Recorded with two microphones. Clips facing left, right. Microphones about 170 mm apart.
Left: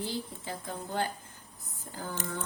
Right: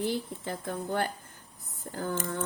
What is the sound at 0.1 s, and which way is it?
Speech, 60° right (ahead or behind).